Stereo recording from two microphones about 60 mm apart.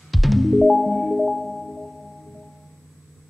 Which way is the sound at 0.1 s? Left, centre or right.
Centre.